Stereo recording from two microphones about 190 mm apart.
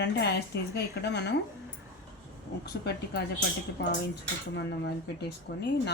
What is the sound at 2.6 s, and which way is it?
Speech, 60° left (ahead or behind).